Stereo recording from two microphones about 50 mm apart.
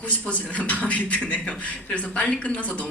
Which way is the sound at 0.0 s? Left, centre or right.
Left.